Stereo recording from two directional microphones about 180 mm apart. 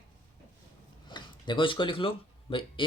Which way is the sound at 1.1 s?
25° left (ahead or behind).